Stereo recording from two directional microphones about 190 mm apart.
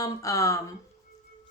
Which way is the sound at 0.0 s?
15° left (ahead or behind).